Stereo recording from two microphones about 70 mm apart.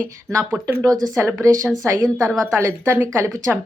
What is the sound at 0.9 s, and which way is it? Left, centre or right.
Speech, right.